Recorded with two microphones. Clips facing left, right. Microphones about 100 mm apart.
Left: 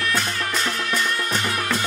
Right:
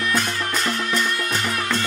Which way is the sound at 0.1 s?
Centre (ahead or behind).